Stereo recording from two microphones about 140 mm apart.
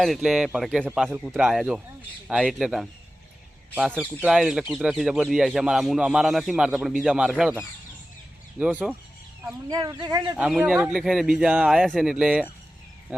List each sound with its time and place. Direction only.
0.0 s speech: centre (ahead or behind)
4.2 s speech: 5° right (ahead or behind)
8.5 s speech: 10° right (ahead or behind)
9.5 s speech: 30° right (ahead or behind)
10.3 s speech: 10° right (ahead or behind)